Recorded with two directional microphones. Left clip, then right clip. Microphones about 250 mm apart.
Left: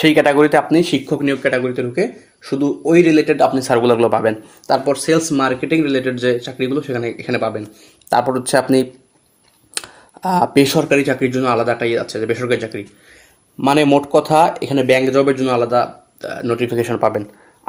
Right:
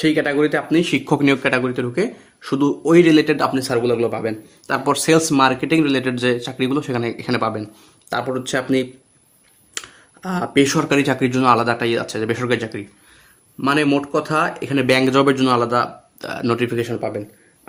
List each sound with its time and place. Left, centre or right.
0.0 s speech: centre
1.1 s speech: right
3.5 s speech: centre
4.9 s speech: right
8.1 s speech: centre
10.2 s speech: centre
10.8 s speech: right
13.6 s speech: centre
14.8 s speech: right
16.6 s speech: centre